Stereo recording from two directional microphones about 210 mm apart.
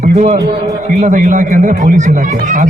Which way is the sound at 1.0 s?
35° right (ahead or behind).